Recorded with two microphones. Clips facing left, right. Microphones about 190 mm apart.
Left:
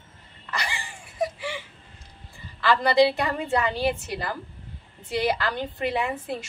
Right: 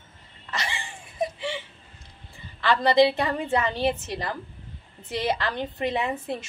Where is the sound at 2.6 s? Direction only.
20° right (ahead or behind).